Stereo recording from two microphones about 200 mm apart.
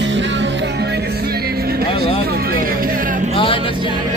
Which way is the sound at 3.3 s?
25° left (ahead or behind).